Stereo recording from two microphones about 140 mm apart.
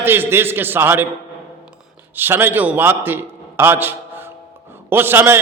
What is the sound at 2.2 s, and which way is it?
A man's voice, 15° right (ahead or behind).